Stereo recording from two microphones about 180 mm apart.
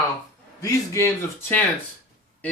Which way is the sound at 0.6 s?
15° left (ahead or behind).